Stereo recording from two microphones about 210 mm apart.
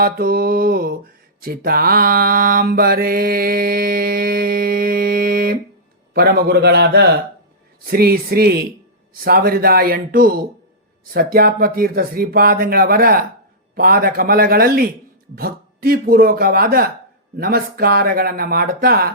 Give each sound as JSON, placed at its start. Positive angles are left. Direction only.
{"t": 0.0, "sound": "mantra", "side_deg": -45}